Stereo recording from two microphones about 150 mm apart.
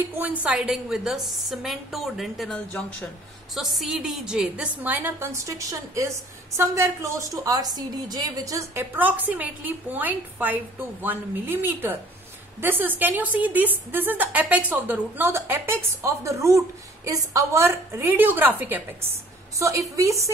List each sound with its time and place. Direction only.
0.0 s a woman's voice: 15° right (ahead or behind)